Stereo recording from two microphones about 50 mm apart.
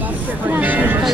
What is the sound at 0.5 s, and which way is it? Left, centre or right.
Music, right.